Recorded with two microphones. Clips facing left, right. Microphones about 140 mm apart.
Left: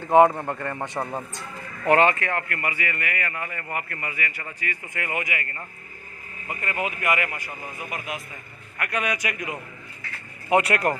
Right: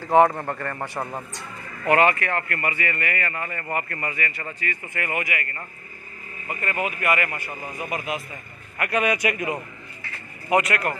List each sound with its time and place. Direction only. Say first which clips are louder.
0.0 s speech: left 1 dB; 20° left (ahead or behind)
2.0 s speech: right 2 dB; 25° left (ahead or behind)
6.6 s speech: right 1 dB; 15° left (ahead or behind)
8.7 s a man's voice: right 4 dB; 5° right (ahead or behind)
9.0 s a man's voice: right 5 dB; 55° right (ahead or behind)
10.5 s speech: left 1 dB; 30° left (ahead or behind)